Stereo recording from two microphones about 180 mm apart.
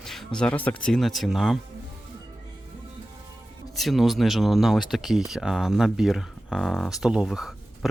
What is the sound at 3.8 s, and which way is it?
Speech, centre (ahead or behind).